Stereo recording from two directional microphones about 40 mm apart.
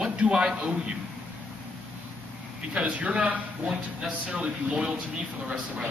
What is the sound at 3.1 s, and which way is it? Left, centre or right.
Speech, right.